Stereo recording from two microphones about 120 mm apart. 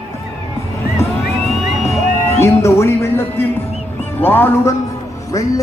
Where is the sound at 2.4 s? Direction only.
25° left (ahead or behind).